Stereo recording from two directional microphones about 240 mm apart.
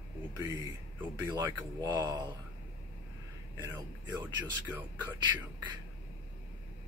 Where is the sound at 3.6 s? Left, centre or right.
Centre.